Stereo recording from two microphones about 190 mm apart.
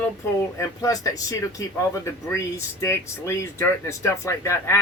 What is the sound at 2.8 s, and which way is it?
Speech, 15° left (ahead or behind).